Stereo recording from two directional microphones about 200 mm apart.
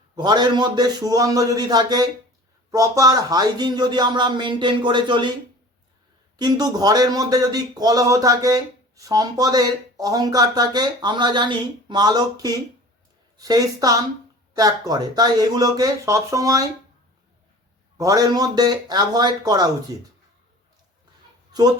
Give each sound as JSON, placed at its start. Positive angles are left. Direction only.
{"t": 0.2, "sound": "speech", "side_deg": -20}
{"t": 6.3, "sound": "a woman's voice", "side_deg": -20}
{"t": 17.9, "sound": "speech", "side_deg": -15}